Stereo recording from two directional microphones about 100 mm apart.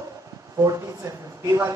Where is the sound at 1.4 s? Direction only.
30° right (ahead or behind).